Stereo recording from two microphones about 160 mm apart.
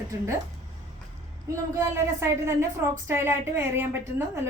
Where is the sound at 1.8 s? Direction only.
15° right (ahead or behind).